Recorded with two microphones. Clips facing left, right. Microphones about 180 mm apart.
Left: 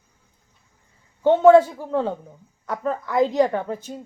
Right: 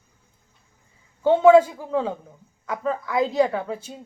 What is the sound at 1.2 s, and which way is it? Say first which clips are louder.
A woman's voice: left 1 dB; 10° right (ahead or behind).